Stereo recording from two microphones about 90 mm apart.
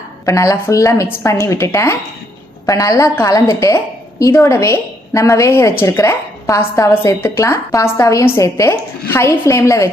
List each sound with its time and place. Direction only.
0.3 s a woman's voice: 35° left (ahead or behind)
1.0 s a woman's voice: 25° left (ahead or behind)
1.3 s a woman's voice: 35° left (ahead or behind)